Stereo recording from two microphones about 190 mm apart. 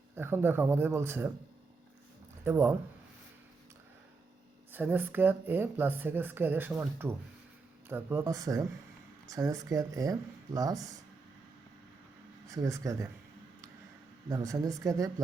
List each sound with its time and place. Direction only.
0.2 s speech: 10° right (ahead or behind)
2.4 s speech: 10° right (ahead or behind)
4.7 s speech: 10° right (ahead or behind)
12.5 s speech: 15° right (ahead or behind)
14.3 s speech: 20° right (ahead or behind)